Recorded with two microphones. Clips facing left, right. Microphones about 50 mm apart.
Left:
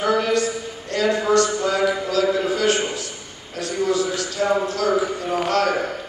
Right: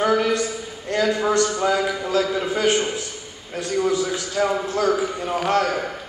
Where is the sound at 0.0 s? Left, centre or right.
Right.